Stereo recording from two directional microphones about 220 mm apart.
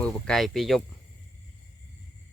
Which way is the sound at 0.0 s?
Centre (ahead or behind).